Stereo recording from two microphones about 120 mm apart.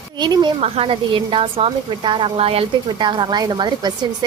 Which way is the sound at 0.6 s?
55° right (ahead or behind).